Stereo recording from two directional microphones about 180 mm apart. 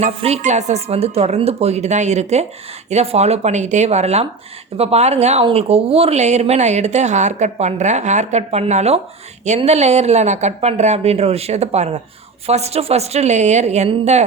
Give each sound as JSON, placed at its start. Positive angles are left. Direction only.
{"t": 0.0, "sound": "speech", "side_deg": -35}